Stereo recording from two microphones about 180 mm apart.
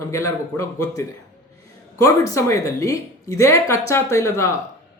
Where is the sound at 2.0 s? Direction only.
20° left (ahead or behind).